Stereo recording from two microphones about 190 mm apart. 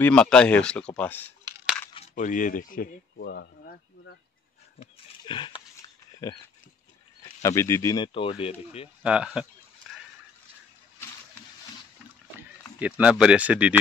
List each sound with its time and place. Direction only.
0.0 s speech: 5° left (ahead or behind)
2.0 s speech: 40° left (ahead or behind); by 3.8 s 60° left (ahead or behind)
4.7 s pig: 25° left (ahead or behind)
7.2 s speech: 15° left (ahead or behind); by 8.9 s 30° left (ahead or behind)
9.0 s speech: 5° right (ahead or behind)
9.9 s a sound: centre (ahead or behind)
12.4 s speech: 10° right (ahead or behind)